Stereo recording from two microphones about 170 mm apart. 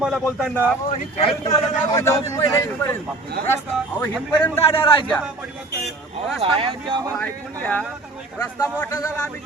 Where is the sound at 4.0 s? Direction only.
15° left (ahead or behind).